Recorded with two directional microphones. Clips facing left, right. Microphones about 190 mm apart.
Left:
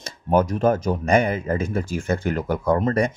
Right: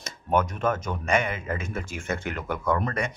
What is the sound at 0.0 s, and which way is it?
Speech, 35° left (ahead or behind).